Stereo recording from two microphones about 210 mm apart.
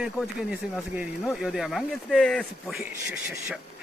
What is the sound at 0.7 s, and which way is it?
Speech, 5° right (ahead or behind).